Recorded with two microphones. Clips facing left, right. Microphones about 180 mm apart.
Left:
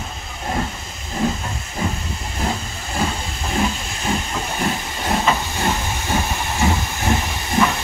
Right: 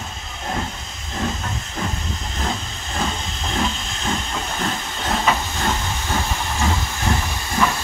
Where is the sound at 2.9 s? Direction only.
10° left (ahead or behind).